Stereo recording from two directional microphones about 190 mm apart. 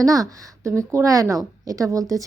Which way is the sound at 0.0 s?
20° right (ahead or behind).